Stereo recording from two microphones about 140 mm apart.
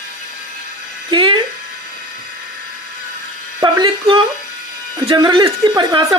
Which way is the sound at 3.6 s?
30° right (ahead or behind).